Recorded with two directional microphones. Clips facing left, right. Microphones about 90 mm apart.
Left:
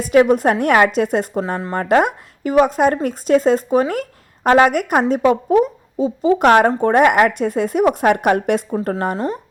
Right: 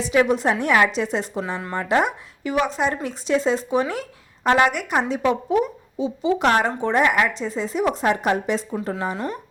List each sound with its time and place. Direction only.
0.0 s a woman's voice: 50° left (ahead or behind)
9.1 s speech: 30° left (ahead or behind)